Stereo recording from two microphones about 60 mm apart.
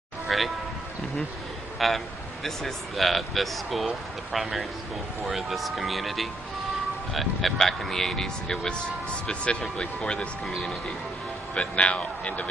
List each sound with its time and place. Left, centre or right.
0.3 s speech: centre
1.8 s speech: centre
11.5 s speech: centre